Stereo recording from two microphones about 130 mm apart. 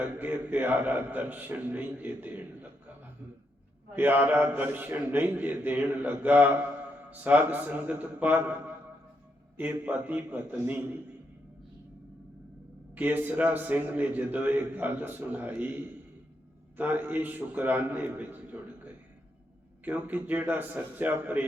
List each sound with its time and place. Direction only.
0.0 s a man's voice: 15° right (ahead or behind)
9.8 s a man's voice: 10° right (ahead or behind)
12.9 s a man's voice: 15° right (ahead or behind)
19.8 s a man's voice: 10° right (ahead or behind)